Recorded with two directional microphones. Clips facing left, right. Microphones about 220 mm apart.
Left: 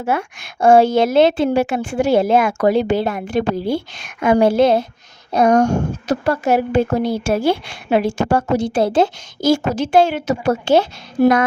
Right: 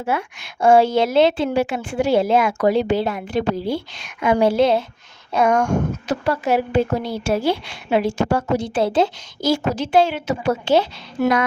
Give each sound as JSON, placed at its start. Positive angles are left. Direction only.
{"t": 0.0, "sound": "a woman's voice", "side_deg": 45}
{"t": 11.2, "sound": "a woman's voice", "side_deg": 35}